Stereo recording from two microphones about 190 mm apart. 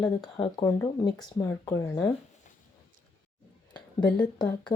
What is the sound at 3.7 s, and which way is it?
Speech, 20° left (ahead or behind).